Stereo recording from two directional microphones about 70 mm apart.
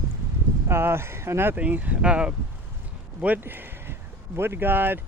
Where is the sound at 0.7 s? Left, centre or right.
Right.